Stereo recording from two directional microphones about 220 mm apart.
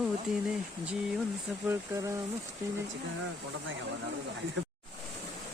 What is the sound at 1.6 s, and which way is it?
Speech, 10° right (ahead or behind).